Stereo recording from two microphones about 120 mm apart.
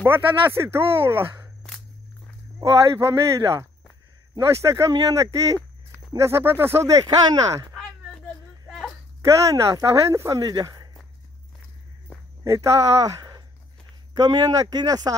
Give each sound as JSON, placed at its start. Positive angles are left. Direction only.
{"t": 0.0, "sound": "speech", "side_deg": -20}
{"t": 2.6, "sound": "speech", "side_deg": -25}
{"t": 7.1, "sound": "speech", "side_deg": -35}
{"t": 7.7, "sound": "a sound", "side_deg": 5}
{"t": 9.3, "sound": "speech", "side_deg": -25}
{"t": 12.4, "sound": "speech", "side_deg": -25}